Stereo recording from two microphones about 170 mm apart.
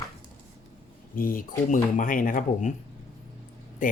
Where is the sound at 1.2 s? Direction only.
55° left (ahead or behind).